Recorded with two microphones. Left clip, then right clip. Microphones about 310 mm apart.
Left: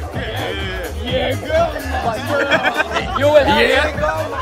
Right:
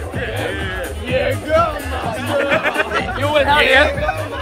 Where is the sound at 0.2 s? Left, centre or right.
Left.